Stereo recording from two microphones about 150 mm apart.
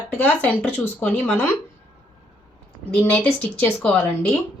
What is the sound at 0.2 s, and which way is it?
Speech, 10° left (ahead or behind).